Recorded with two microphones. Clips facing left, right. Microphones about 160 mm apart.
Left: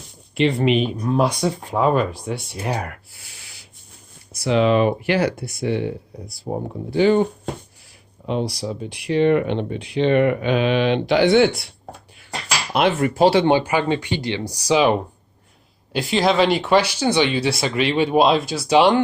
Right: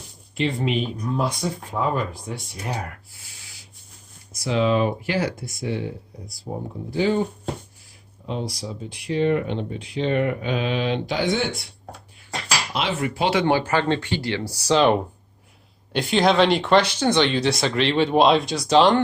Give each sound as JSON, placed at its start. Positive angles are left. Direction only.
{"t": 0.3, "sound": "speech", "side_deg": 75}
{"t": 3.3, "sound": "sanding", "side_deg": 65}
{"t": 4.3, "sound": "speech", "side_deg": 65}
{"t": 8.3, "sound": "speech", "side_deg": 70}
{"t": 12.7, "sound": "speech", "side_deg": 55}
{"t": 13.4, "sound": "speech", "side_deg": 20}